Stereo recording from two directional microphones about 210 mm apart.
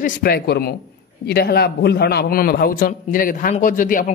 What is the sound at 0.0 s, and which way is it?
A man's voice, 50° left (ahead or behind).